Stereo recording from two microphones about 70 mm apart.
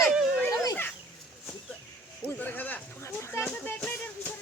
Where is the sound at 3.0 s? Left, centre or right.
Left.